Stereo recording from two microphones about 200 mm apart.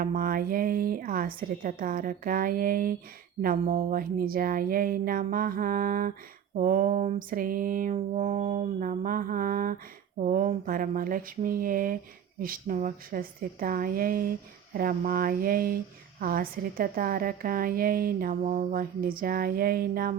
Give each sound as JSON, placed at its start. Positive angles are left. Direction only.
{"t": 0.0, "sound": "a woman's voice", "side_deg": -45}